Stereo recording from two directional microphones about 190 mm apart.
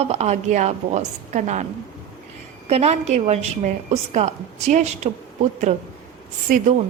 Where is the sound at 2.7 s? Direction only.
35° right (ahead or behind).